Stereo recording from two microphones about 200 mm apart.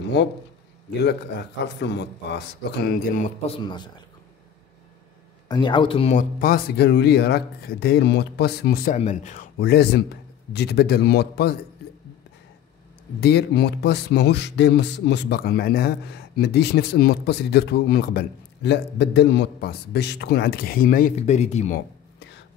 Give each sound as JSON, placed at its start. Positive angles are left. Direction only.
{"t": 1.6, "sound": "speech", "side_deg": 60}
{"t": 3.4, "sound": "speech", "side_deg": 25}
{"t": 5.5, "sound": "speech", "side_deg": 25}
{"t": 6.1, "sound": "speech", "side_deg": 45}
{"t": 8.9, "sound": "speech", "side_deg": 35}
{"t": 13.2, "sound": "speech", "side_deg": 55}
{"t": 21.2, "sound": "speech", "side_deg": 35}